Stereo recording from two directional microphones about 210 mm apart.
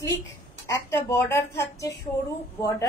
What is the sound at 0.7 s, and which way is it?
A woman's voice, 15° left (ahead or behind).